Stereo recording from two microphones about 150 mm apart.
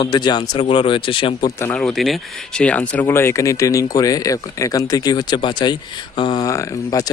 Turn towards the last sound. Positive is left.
turn(degrees=25)  # may be behind; listen again after turning